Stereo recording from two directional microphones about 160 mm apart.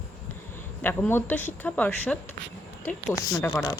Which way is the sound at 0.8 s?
10° left (ahead or behind).